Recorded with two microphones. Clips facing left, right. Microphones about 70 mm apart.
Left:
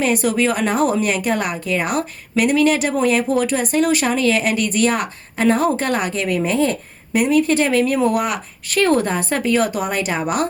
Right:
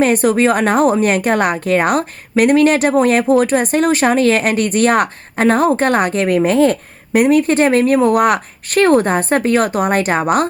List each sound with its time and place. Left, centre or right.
0.0 s a woman's voice: right